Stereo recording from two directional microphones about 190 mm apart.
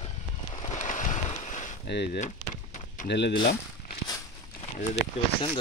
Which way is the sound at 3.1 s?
65° left (ahead or behind).